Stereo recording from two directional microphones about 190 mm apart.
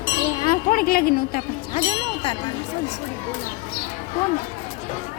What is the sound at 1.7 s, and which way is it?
Speech, 30° left (ahead or behind).